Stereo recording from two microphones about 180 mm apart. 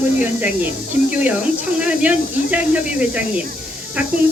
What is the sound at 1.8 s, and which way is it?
Speech, 5° right (ahead or behind).